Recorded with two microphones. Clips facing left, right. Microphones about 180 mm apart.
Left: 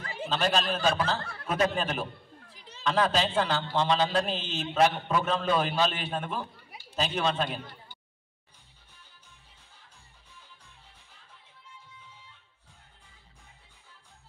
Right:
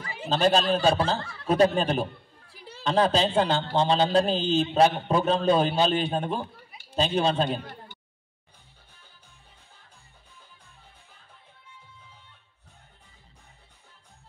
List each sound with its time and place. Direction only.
0.3 s a man's voice: 35° right (ahead or behind)
2.5 s a sound: 10° right (ahead or behind)
2.8 s a man's voice: 30° right (ahead or behind)